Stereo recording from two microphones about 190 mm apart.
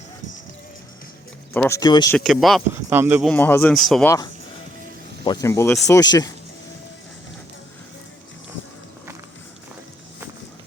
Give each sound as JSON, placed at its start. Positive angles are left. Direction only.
{"t": 1.5, "sound": "speech", "side_deg": 10}
{"t": 1.8, "sound": "speech", "side_deg": 20}
{"t": 2.1, "sound": "speech", "side_deg": 0}
{"t": 3.2, "sound": "speech", "side_deg": 10}
{"t": 4.0, "sound": "speech", "side_deg": 15}